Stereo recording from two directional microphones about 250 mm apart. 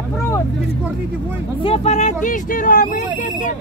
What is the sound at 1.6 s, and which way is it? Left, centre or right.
Speech, left.